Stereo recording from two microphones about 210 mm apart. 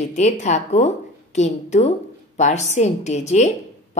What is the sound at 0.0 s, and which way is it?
A woman's voice, 35° left (ahead or behind).